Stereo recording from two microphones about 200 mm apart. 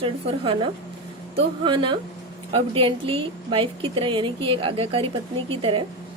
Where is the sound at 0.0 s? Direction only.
25° right (ahead or behind).